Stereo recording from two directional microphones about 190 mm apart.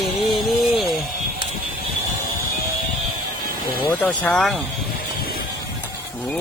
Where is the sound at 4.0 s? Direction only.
5° left (ahead or behind).